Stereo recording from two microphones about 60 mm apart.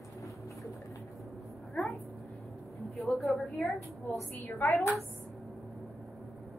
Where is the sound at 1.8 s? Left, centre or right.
Centre.